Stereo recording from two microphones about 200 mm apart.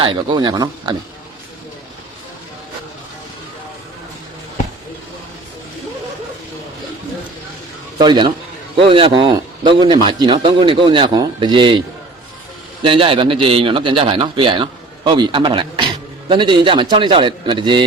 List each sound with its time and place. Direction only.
0.0 s a man's voice: 25° right (ahead or behind)
7.9 s a man's voice: 20° right (ahead or behind)
12.8 s a man's voice: 25° right (ahead or behind)